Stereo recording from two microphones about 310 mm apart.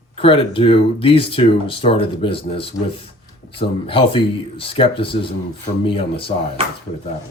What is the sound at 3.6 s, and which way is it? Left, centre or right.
Speech, centre.